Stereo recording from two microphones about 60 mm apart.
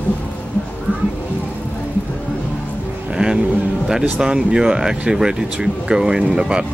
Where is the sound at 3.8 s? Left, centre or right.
Centre.